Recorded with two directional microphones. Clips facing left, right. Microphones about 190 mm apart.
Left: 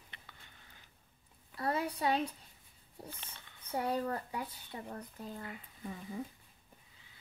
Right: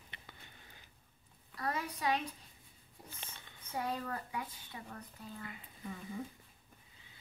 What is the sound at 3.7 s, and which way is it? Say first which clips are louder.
Speech: left 4 dB; 30° left (ahead or behind).